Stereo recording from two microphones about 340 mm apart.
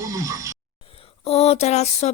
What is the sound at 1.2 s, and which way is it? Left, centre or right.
Speech, centre.